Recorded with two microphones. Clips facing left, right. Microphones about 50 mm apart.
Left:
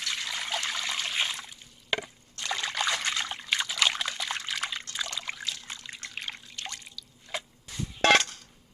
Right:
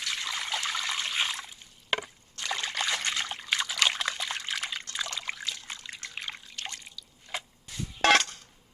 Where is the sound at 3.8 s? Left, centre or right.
Centre.